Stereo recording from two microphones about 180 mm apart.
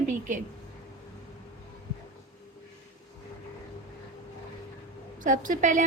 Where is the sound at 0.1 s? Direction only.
45° right (ahead or behind).